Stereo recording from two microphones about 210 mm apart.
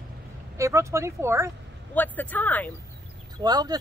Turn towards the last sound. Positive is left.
turn(degrees=-20)  # may be behind; listen again after turning